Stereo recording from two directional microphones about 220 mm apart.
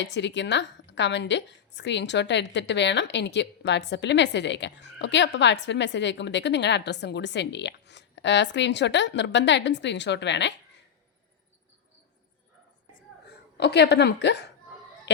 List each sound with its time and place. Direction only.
0.0 s a woman's voice: 55° left (ahead or behind)
13.6 s a woman's voice: 50° left (ahead or behind)